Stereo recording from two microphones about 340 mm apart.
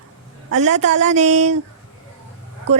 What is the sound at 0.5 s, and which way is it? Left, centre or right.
Speech, right.